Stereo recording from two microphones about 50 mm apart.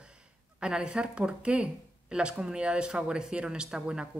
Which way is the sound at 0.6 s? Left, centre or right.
Centre.